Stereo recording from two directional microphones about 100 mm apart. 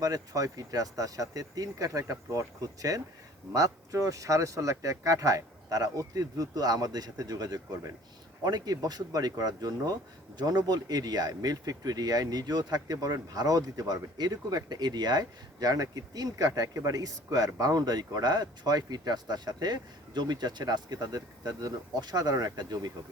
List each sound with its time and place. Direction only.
0.0 s speech: 35° right (ahead or behind)